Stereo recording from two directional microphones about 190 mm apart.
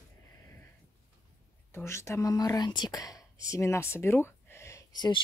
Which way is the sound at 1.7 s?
15° left (ahead or behind).